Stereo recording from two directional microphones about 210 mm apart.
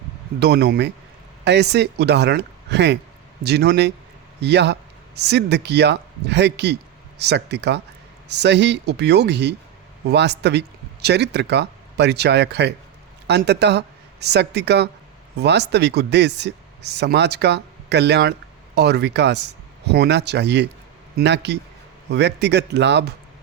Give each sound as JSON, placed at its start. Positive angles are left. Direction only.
{"t": 0.3, "sound": "a man's voice", "side_deg": -50}